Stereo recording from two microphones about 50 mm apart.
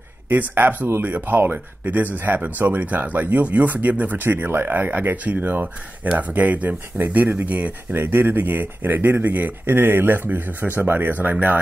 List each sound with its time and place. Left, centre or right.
0.3 s speech: right
8.0 s speech: right